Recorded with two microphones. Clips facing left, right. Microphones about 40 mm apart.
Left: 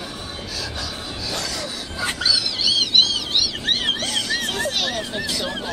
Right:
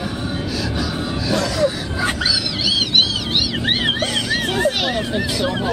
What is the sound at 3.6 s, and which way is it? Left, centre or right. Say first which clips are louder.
Vehicle: right 4 dB; right.